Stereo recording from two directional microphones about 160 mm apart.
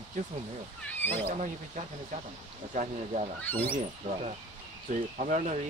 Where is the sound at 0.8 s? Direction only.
10° left (ahead or behind).